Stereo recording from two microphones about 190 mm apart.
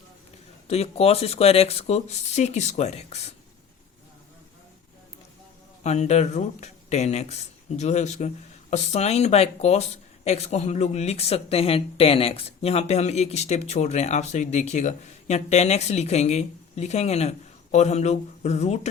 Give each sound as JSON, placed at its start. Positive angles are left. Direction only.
{"t": 0.7, "sound": "speech", "side_deg": 30}
{"t": 5.8, "sound": "speech", "side_deg": 35}